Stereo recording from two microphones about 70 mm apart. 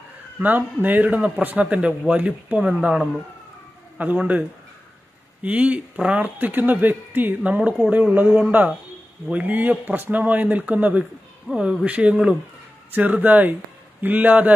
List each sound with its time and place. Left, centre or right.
0.4 s a man's voice: right; by 3.1 s centre
4.0 s a man's voice: right